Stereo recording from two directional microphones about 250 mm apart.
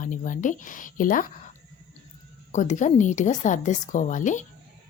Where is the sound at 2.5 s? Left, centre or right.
Left.